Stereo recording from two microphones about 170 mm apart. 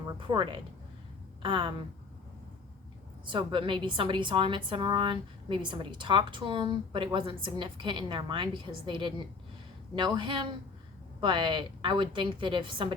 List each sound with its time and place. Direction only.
0.2 s a woman's voice: 30° right (ahead or behind)
3.2 s a woman's voice: 30° right (ahead or behind)